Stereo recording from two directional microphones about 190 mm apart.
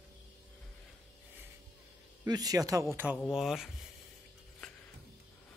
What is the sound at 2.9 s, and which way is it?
Speech, 10° right (ahead or behind).